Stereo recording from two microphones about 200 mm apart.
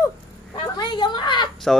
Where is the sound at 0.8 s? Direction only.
20° left (ahead or behind).